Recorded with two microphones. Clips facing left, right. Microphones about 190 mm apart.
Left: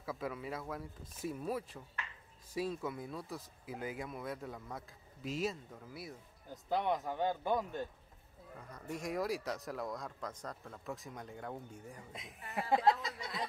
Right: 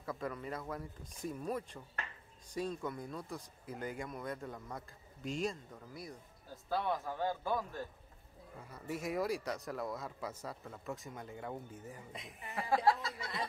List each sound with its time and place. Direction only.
0.0 s speech: 5° left (ahead or behind)
6.5 s speech: 20° left (ahead or behind)
8.6 s speech: 5° right (ahead or behind)
12.5 s speech: 20° left (ahead or behind)